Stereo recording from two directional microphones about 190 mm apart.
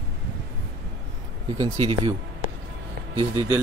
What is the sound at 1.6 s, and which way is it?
Speech, 30° right (ahead or behind).